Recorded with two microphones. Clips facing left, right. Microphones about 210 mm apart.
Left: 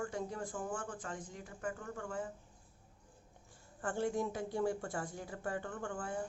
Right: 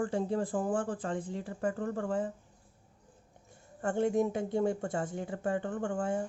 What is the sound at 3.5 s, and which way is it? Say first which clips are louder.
Speech: right 7 dB; 25° right (ahead or behind).